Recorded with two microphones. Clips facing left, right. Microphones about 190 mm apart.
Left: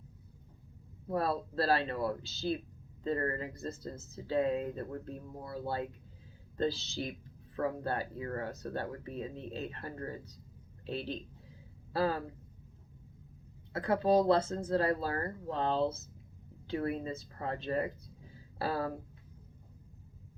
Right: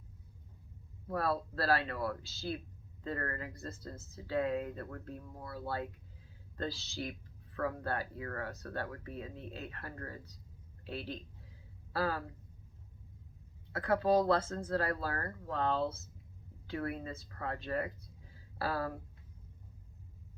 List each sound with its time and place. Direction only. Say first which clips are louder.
1.0 s speech: left 2 dB; 25° left (ahead or behind)
13.7 s speech: left 2 dB; 20° left (ahead or behind)